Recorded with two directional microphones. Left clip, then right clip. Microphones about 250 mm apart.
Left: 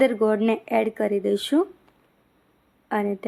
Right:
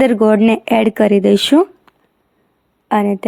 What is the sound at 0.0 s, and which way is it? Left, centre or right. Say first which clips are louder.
Speech: right 8 dB; right.